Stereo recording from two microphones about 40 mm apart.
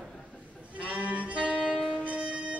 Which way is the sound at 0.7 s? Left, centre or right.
Right.